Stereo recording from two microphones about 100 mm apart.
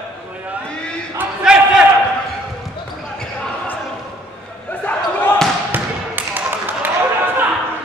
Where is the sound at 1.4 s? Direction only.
5° right (ahead or behind).